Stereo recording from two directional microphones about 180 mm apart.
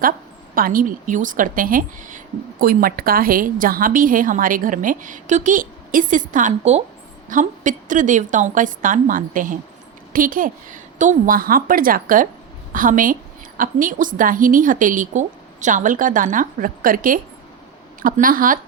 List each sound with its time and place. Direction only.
0.5 s a woman's voice: 50° right (ahead or behind)